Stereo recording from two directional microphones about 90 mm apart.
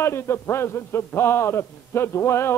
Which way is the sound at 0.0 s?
30° left (ahead or behind).